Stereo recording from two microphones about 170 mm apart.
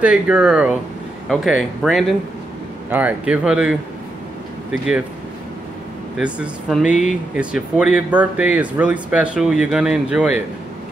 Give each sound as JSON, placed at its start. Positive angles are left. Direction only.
{"t": 0.0, "sound": "speech", "side_deg": -5}
{"t": 6.1, "sound": "speech", "side_deg": -5}